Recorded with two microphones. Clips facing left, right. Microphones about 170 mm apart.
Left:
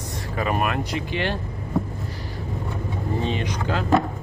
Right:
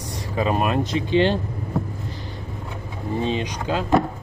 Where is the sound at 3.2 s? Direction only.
15° right (ahead or behind).